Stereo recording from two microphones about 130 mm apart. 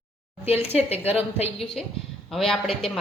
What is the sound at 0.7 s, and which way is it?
Speech, 50° left (ahead or behind).